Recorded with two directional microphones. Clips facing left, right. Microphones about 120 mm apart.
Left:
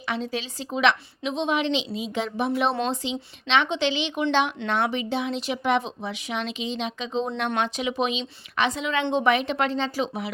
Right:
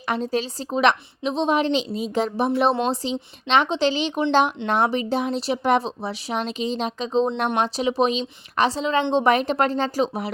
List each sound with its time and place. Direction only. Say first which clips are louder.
0.1 s speech: right 5 dB; 40° right (ahead or behind)